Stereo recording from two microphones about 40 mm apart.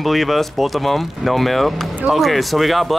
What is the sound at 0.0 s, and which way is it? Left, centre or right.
Speech, centre.